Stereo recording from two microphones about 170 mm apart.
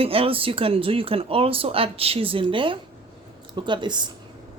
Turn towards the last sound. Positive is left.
turn(degrees=-25)  # may be behind; listen again after turning